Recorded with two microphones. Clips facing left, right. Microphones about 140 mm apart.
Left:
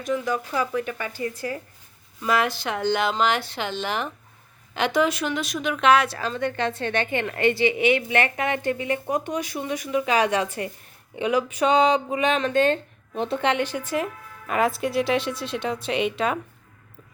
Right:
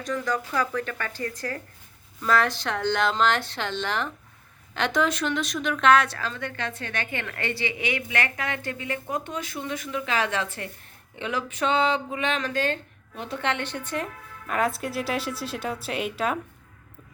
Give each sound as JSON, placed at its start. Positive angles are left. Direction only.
{"t": 0.0, "sound": "a woman's voice", "side_deg": 10}
{"t": 6.1, "sound": "a woman's voice", "side_deg": 20}
{"t": 13.4, "sound": "speech", "side_deg": 15}